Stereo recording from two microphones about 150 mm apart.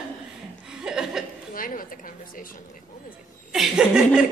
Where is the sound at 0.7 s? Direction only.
5° right (ahead or behind).